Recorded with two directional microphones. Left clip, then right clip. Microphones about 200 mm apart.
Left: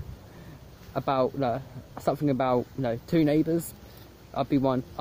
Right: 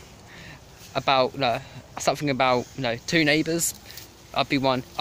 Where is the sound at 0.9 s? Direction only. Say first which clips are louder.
Right 4 dB; centre (ahead or behind).